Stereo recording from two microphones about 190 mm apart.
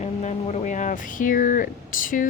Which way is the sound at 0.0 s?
35° left (ahead or behind).